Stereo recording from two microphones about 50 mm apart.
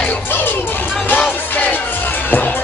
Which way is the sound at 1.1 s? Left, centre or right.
Left.